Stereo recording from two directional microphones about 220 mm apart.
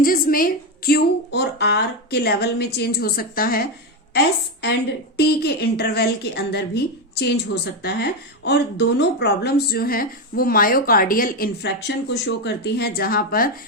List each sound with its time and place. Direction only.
0.0 s speech: 40° left (ahead or behind)
5.1 s speech: 45° left (ahead or behind)